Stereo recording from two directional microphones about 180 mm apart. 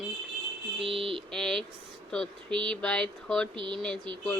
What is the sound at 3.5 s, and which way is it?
Speech, 25° right (ahead or behind).